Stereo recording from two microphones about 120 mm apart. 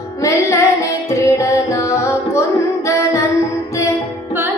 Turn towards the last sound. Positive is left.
turn(degrees=25)  # may be behind; listen again after turning